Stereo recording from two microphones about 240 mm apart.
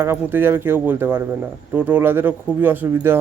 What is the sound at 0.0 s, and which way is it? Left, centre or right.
Speech, centre.